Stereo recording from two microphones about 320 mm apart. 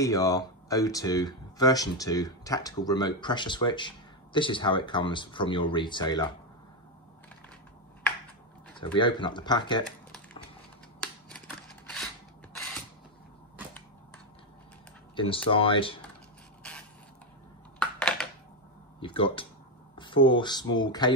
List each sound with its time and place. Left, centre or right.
0.0 s speech: centre
8.9 s speech: centre
11.0 s scissors: centre
15.1 s speech: centre
17.7 s a sound: centre
18.9 s speech: centre